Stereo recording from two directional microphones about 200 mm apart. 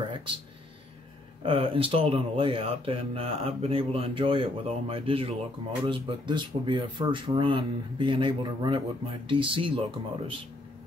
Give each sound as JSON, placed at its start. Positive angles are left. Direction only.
{"t": 1.4, "sound": "speech", "side_deg": -25}